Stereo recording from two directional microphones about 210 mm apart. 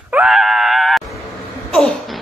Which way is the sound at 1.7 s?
Centre (ahead or behind).